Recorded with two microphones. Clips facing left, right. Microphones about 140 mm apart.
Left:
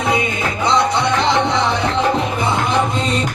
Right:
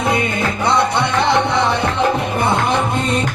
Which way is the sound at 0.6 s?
55° right (ahead or behind).